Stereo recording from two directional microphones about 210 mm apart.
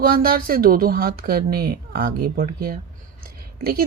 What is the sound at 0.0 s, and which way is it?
Speech, 45° right (ahead or behind).